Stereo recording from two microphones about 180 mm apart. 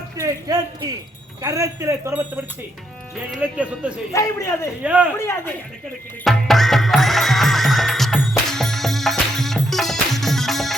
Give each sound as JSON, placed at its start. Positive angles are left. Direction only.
{"t": 0.2, "sound": "a man's voice", "side_deg": -20}
{"t": 4.1, "sound": "a man's voice", "side_deg": 15}
{"t": 4.8, "sound": "speech", "side_deg": -10}
{"t": 6.2, "sound": "music", "side_deg": 0}